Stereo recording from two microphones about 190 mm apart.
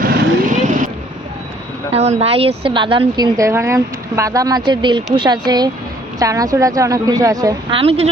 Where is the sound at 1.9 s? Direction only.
35° right (ahead or behind); by 7.8 s 20° right (ahead or behind).